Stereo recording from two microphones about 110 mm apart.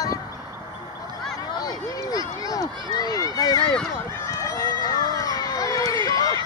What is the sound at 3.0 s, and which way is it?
Run, 35° left (ahead or behind).